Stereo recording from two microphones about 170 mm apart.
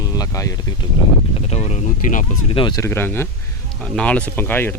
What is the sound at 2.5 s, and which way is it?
Speech, 30° left (ahead or behind).